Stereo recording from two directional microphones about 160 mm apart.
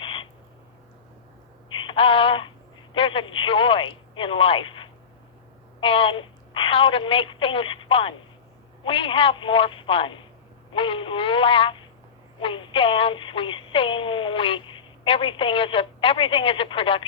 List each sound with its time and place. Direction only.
0.0 s frog: 30° left (ahead or behind)
1.7 s telephone: 30° left (ahead or behind)
2.9 s a woman's voice: 35° left (ahead or behind)